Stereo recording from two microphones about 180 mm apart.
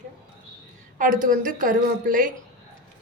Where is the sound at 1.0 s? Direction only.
45° right (ahead or behind).